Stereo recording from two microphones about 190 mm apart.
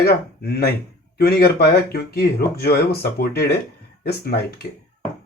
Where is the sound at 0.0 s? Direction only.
55° left (ahead or behind).